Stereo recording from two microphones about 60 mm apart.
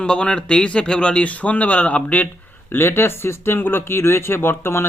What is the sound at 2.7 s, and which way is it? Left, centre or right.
Speech, left.